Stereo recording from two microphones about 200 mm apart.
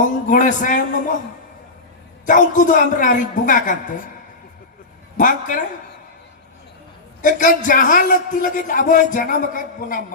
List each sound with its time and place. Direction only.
0.3 s a man's voice: 40° left (ahead or behind)
2.2 s a man's voice: 40° left (ahead or behind)
5.1 s a man's voice: 40° left (ahead or behind)
7.2 s a man's voice: 40° left (ahead or behind)